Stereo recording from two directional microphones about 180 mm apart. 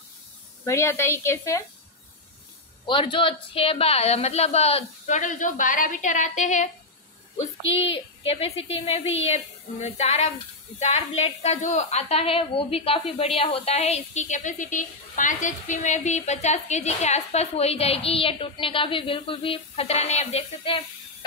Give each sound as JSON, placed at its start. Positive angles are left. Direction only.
{"t": 0.7, "sound": "a woman's voice", "side_deg": 15}
{"t": 2.9, "sound": "a woman's voice", "side_deg": 30}
{"t": 7.7, "sound": "a woman's voice", "side_deg": 30}